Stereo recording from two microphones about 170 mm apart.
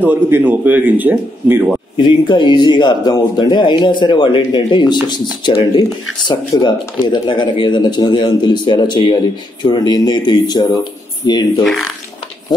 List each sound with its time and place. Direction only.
0.0 s speech: 10° right (ahead or behind)
2.0 s speech: 25° left (ahead or behind)